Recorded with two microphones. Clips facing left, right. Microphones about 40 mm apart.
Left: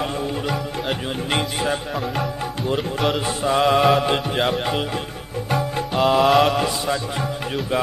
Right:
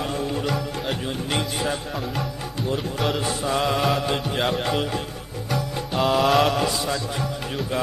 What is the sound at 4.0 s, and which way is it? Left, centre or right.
Speech, left.